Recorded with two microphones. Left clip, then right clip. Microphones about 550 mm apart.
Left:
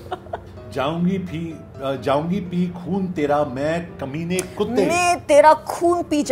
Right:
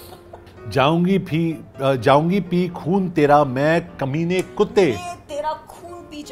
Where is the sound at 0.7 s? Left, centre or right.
Right.